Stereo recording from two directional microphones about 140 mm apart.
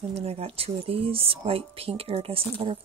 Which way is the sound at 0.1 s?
45° right (ahead or behind).